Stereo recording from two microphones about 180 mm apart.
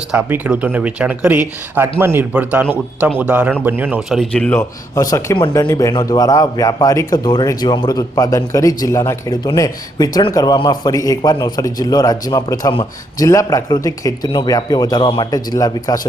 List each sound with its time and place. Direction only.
0.1 s speech: 10° right (ahead or behind); by 4.6 s 5° left (ahead or behind)
5.5 s a man's voice: 15° left (ahead or behind)